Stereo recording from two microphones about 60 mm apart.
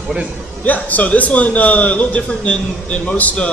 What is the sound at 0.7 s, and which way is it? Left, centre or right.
A man's voice, left.